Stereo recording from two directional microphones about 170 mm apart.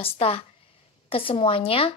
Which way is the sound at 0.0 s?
35° left (ahead or behind).